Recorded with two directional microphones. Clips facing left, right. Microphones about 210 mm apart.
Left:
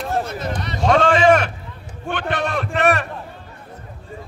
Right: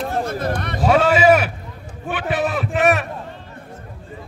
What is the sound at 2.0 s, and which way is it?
A man's voice, 5° right (ahead or behind).